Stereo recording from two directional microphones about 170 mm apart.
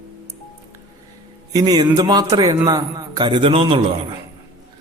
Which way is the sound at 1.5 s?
20° right (ahead or behind).